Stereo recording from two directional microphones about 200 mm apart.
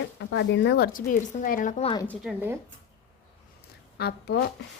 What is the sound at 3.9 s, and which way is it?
Speech, 55° left (ahead or behind).